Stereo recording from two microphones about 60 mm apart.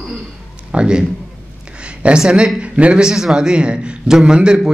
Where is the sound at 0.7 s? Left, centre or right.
Centre.